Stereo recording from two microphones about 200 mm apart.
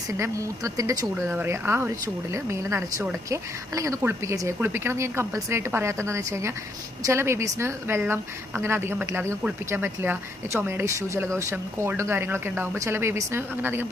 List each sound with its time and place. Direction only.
0.1 s a woman's voice: 15° right (ahead or behind)